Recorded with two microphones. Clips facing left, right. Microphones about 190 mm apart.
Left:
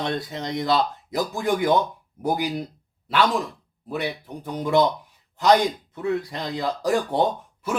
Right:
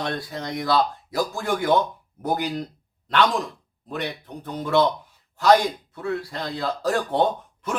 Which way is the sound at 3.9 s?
10° left (ahead or behind).